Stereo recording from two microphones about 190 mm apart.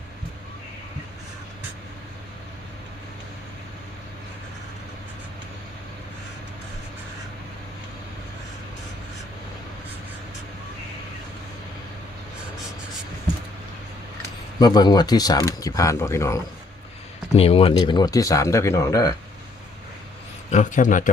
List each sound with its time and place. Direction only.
14.6 s speech: 20° left (ahead or behind)
17.3 s speech: 30° left (ahead or behind)
20.5 s a man's voice: 40° left (ahead or behind)